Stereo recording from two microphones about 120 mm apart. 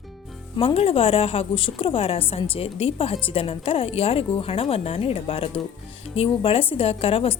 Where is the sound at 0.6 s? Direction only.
50° left (ahead or behind).